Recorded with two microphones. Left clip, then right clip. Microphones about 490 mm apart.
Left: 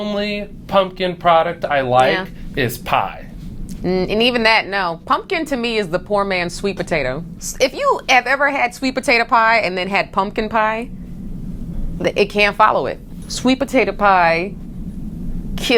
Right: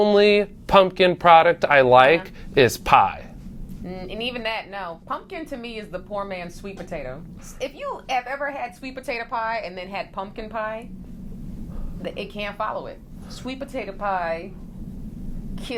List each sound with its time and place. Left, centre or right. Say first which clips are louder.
0.0 s speech: right 6 dB; right
3.8 s speech: left 14 dB; left
12.0 s speech: left 15 dB; left